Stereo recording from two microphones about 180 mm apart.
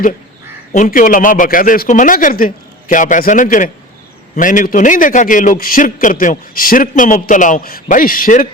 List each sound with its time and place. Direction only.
0.7 s a man's voice: 50° left (ahead or behind)